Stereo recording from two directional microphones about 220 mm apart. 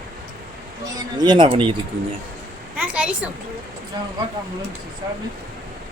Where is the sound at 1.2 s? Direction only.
20° right (ahead or behind).